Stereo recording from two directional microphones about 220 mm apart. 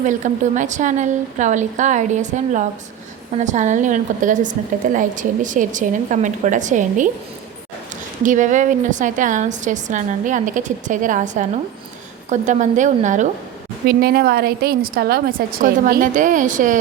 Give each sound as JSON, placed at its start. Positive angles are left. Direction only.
{"t": 0.0, "sound": "a woman's voice", "side_deg": -35}
{"t": 8.2, "sound": "a woman's voice", "side_deg": -35}
{"t": 13.8, "sound": "a woman's voice", "side_deg": -45}